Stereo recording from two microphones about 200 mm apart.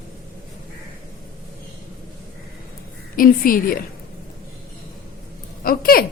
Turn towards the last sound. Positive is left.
turn(degrees=45)  # may be behind; listen again after turning